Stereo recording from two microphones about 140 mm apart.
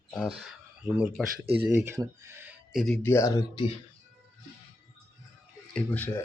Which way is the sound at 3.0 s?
20° left (ahead or behind).